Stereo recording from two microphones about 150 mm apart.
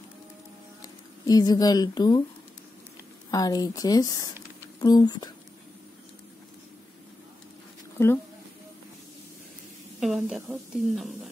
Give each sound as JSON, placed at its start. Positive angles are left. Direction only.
{"t": 0.8, "sound": "speech", "side_deg": 25}
{"t": 3.3, "sound": "speech", "side_deg": 25}
{"t": 8.0, "sound": "speech", "side_deg": 20}
{"t": 9.9, "sound": "a woman's voice", "side_deg": -5}